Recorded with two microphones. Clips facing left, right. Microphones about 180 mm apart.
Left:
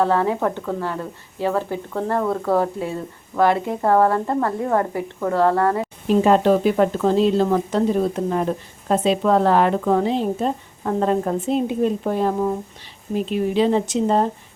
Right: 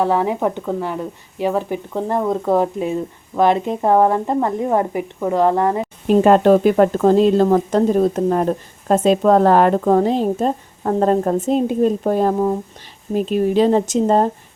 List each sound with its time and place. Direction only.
0.0 s speech: 15° right (ahead or behind)
6.1 s speech: 55° right (ahead or behind)